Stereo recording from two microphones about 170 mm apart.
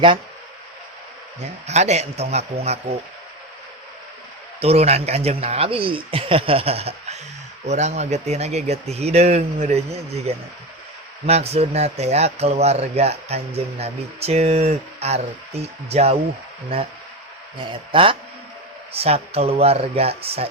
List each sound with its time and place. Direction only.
1.6 s a man's voice: 40° right (ahead or behind)
4.6 s a man's voice: 35° right (ahead or behind)
17.7 s a man's voice: 30° right (ahead or behind)